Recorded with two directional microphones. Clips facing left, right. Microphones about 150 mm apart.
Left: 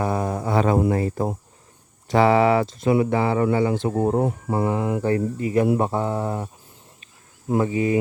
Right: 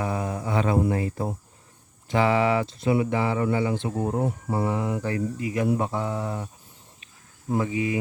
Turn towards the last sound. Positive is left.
turn(degrees=40)  # may be behind; listen again after turning